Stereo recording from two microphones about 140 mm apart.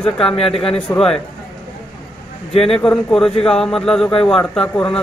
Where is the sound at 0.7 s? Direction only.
5° left (ahead or behind).